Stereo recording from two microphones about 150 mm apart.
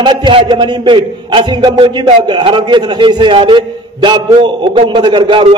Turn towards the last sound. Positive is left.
turn(degrees=-35)  # may be behind; listen again after turning